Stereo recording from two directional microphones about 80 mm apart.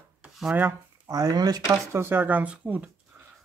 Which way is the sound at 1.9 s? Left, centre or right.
Right.